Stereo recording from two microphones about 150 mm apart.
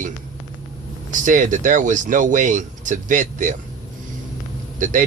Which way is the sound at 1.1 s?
60° right (ahead or behind).